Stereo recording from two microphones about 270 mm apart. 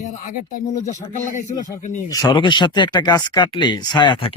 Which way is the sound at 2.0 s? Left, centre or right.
Centre.